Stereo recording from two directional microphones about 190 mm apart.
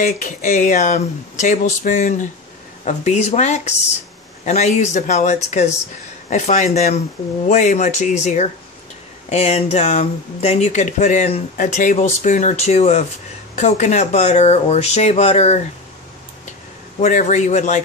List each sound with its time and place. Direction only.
0.0 s speech: 40° left (ahead or behind)
17.0 s speech: 40° left (ahead or behind)